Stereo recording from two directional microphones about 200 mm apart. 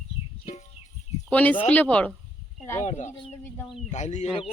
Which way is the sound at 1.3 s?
10° left (ahead or behind).